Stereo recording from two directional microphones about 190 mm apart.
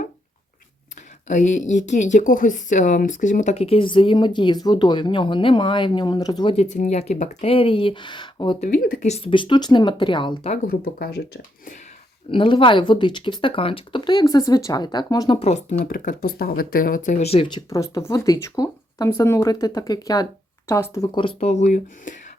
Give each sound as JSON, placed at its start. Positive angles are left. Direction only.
{"t": 1.3, "sound": "speech", "side_deg": 40}
{"t": 8.6, "sound": "speech", "side_deg": 50}
{"t": 10.5, "sound": "speech", "side_deg": 50}
{"t": 12.3, "sound": "speech", "side_deg": 25}
{"t": 15.8, "sound": "speech", "side_deg": 50}
{"t": 21.2, "sound": "speech", "side_deg": 30}